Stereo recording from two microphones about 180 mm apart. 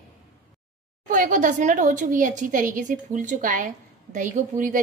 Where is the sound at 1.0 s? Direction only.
45° right (ahead or behind).